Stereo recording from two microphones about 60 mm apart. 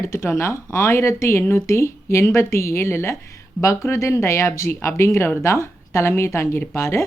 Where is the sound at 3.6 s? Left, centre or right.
Left.